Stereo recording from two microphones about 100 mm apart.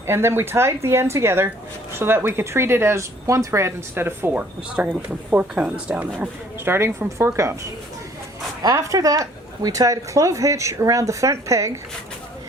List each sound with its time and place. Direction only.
0.1 s speech: 25° right (ahead or behind)
6.7 s speech: 25° right (ahead or behind)